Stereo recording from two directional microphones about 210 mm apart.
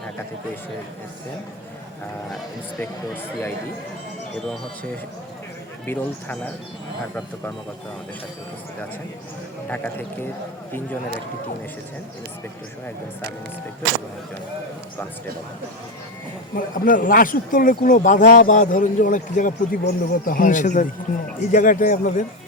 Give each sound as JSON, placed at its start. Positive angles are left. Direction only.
{"t": 2.3, "sound": "speech", "side_deg": 5}
{"t": 4.4, "sound": "speech", "side_deg": 0}
{"t": 9.6, "sound": "speech", "side_deg": 10}
{"t": 16.6, "sound": "speech", "side_deg": 40}